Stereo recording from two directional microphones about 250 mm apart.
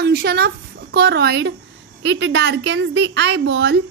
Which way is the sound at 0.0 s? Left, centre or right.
Right.